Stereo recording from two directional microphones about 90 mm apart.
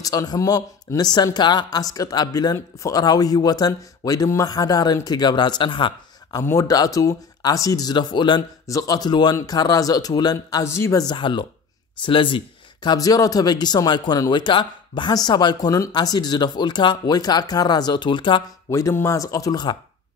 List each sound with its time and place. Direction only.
0.0 s speech: 45° left (ahead or behind)
3.0 s speech: 45° left (ahead or behind); by 5.9 s 65° left (ahead or behind)
6.4 s speech: 35° left (ahead or behind)
6.7 s speech: 45° left (ahead or behind)
8.6 s speech: 40° left (ahead or behind)
11.1 s speech: 65° left (ahead or behind)
12.9 s speech: 40° left (ahead or behind); by 18.4 s 60° left (ahead or behind)
18.7 s speech: 35° left (ahead or behind)